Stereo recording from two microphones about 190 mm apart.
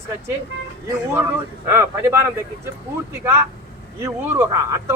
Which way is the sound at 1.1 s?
15° right (ahead or behind).